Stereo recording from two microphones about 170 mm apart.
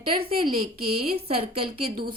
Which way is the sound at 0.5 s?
60° right (ahead or behind).